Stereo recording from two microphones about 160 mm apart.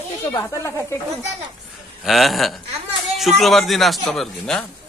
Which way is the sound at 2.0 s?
Centre (ahead or behind).